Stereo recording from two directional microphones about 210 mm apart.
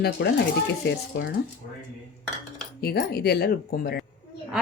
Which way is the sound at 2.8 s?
50° left (ahead or behind).